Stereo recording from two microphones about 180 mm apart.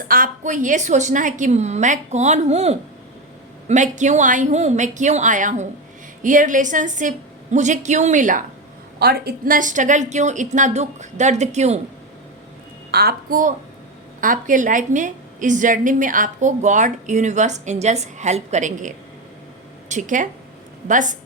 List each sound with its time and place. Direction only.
0.1 s a woman's voice: 45° right (ahead or behind)
9.0 s a woman's voice: 60° right (ahead or behind); by 11.8 s 40° right (ahead or behind)
12.9 s a woman's voice: 60° right (ahead or behind)